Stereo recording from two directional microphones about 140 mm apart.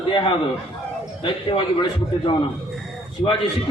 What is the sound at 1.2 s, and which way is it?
A man's voice, 35° left (ahead or behind).